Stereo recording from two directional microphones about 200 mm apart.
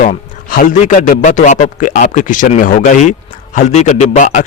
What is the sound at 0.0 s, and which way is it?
A man's voice, 40° left (ahead or behind).